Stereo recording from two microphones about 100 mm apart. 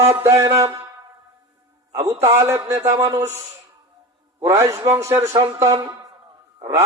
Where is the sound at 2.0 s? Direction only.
25° right (ahead or behind).